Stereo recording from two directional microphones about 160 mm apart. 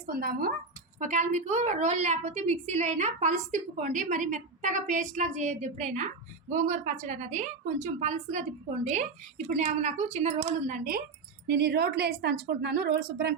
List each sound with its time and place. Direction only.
0.1 s speech: 65° right (ahead or behind)
0.9 s a woman's voice: 50° right (ahead or behind)
11.4 s a woman's voice: 90° right